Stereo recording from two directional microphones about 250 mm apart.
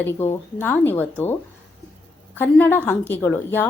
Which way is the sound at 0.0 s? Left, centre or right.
Centre.